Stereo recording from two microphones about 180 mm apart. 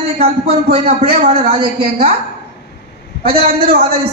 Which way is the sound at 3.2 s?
35° right (ahead or behind).